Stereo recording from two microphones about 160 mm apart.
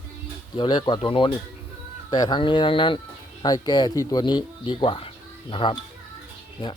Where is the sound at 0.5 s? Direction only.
30° left (ahead or behind).